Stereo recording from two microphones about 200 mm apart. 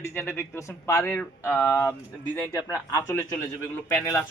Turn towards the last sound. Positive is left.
turn(degrees=10)  # may be behind; listen again after turning